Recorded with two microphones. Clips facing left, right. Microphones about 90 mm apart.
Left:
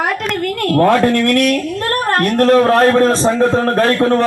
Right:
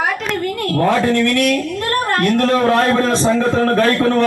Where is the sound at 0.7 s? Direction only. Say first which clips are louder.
Left 4 dB; 50° left (ahead or behind).